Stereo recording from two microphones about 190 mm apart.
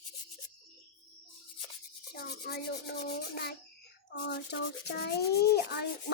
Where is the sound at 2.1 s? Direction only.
60° left (ahead or behind).